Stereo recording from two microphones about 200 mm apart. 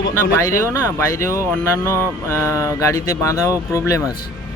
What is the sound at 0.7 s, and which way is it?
Speech, 15° left (ahead or behind).